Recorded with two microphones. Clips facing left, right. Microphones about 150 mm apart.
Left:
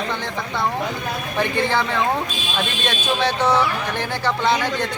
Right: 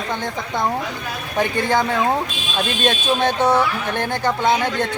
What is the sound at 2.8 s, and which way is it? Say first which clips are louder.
Speech: right 3 dB; 50° right (ahead or behind).